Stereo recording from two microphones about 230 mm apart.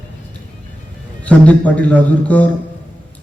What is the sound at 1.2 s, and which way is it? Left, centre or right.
A man's voice, centre.